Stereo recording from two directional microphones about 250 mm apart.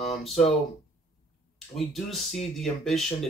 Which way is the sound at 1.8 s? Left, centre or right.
Centre.